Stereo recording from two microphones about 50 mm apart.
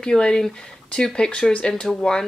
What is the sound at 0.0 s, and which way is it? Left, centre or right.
Speech, centre.